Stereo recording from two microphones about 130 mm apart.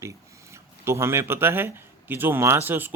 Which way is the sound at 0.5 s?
20° right (ahead or behind).